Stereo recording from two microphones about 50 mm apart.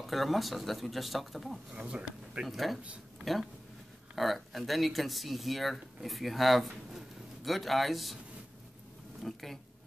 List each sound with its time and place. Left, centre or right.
0.0 s speech: centre
1.8 s speech: right
2.4 s speech: centre
9.2 s speech: centre